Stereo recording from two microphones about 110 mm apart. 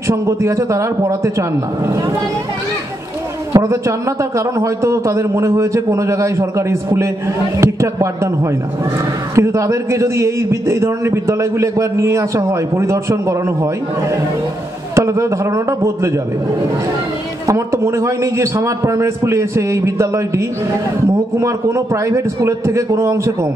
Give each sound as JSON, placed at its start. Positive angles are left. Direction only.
{"t": 0.0, "sound": "a man's voice", "side_deg": -25}
{"t": 3.5, "sound": "a man's voice", "side_deg": -25}
{"t": 9.3, "sound": "a man's voice", "side_deg": -25}
{"t": 15.0, "sound": "a man's voice", "side_deg": -25}
{"t": 17.5, "sound": "a man's voice", "side_deg": -25}